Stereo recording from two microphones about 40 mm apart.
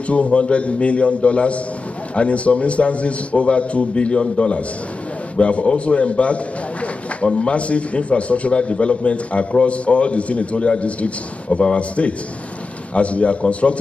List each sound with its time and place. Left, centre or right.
0.1 s a man's voice: left